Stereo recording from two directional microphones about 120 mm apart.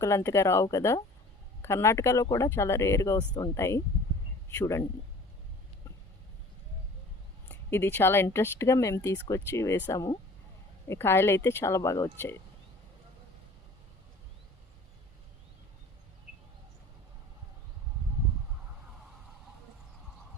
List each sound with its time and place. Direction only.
0.0 s a man's voice: 25° left (ahead or behind)
7.4 s speech: 20° left (ahead or behind)